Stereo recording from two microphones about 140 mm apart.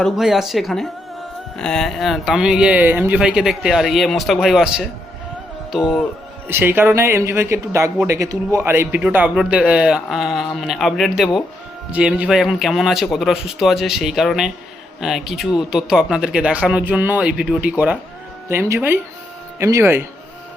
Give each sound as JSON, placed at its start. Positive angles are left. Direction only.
{"t": 0.0, "sound": "speech", "side_deg": 0}
{"t": 6.5, "sound": "speech", "side_deg": -15}